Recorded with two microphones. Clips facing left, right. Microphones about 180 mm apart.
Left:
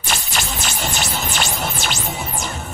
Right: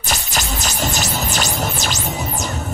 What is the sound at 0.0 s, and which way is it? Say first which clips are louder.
Music: right 1 dB; 40° right (ahead or behind).